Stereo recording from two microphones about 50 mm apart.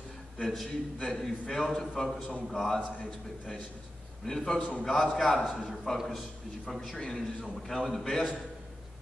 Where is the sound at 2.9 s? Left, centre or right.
Left.